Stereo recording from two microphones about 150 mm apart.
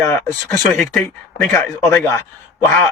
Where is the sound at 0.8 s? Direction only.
5° left (ahead or behind).